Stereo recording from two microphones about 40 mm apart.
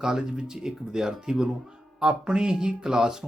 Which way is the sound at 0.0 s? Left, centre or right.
Centre.